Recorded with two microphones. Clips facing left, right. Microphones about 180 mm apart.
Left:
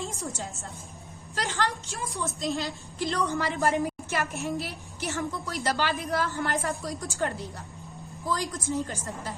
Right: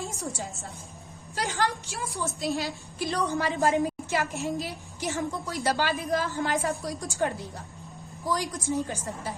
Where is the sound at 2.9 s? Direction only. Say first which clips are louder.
Even; 15° right (ahead or behind).